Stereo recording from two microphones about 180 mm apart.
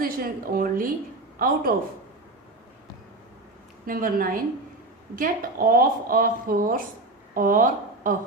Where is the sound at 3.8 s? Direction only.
50° right (ahead or behind).